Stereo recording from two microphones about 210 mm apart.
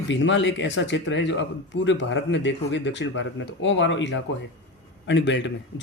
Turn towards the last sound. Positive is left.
turn(degrees=60)  # may be behind; listen again after turning